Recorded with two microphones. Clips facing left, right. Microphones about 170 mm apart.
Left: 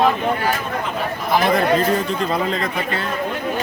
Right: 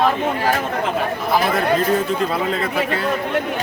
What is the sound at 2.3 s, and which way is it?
Speech, 5° right (ahead or behind).